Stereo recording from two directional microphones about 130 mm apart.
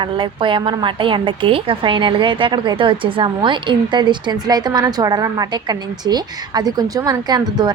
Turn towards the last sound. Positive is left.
turn(degrees=-30)  # may be behind; listen again after turning